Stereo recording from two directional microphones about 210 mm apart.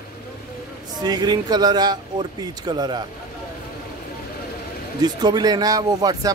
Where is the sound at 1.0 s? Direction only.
20° right (ahead or behind).